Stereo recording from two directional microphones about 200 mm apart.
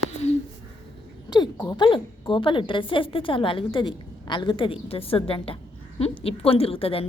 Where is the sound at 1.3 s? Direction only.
20° left (ahead or behind).